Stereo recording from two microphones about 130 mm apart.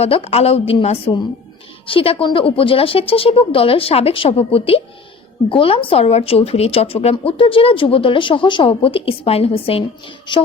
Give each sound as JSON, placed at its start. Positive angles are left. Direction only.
{"t": 0.0, "sound": "speech", "side_deg": 50}
{"t": 10.3, "sound": "a woman's voice", "side_deg": 35}